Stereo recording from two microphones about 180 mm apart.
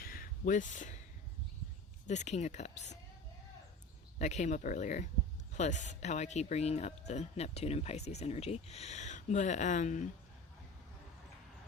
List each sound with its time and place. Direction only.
0.0 s a sound: 50° left (ahead or behind)
2.0 s speech: 40° left (ahead or behind)
4.2 s speech: 40° left (ahead or behind)